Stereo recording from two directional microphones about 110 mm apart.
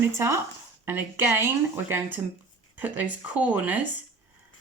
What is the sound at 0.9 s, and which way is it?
Speech, 20° right (ahead or behind).